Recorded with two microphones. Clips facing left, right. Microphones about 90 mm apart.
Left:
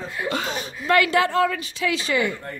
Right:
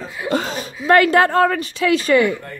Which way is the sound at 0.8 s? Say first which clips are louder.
Right 6 dB; 45° right (ahead or behind).